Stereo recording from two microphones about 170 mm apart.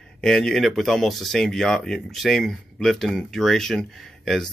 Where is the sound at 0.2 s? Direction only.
5° left (ahead or behind).